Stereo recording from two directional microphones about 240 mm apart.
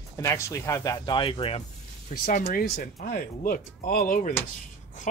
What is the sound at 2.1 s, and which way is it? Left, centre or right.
Speech, left.